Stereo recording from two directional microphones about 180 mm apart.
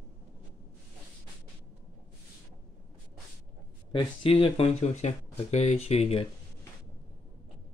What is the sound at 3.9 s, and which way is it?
Speech, 30° left (ahead or behind).